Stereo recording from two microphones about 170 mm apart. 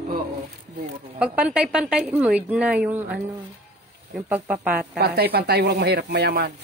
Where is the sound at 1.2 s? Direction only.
5° right (ahead or behind).